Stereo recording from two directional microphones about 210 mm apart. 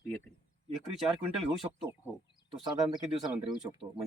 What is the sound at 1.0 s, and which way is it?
Speech, centre (ahead or behind).